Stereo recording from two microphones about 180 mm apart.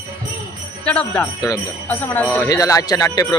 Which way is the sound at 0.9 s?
5° left (ahead or behind).